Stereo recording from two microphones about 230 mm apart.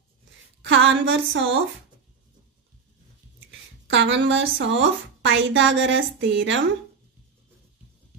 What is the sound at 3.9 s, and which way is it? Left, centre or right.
A woman's voice, right.